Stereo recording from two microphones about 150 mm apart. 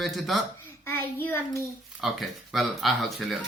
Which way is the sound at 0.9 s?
15° left (ahead or behind).